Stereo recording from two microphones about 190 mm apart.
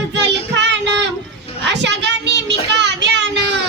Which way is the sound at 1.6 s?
65° right (ahead or behind).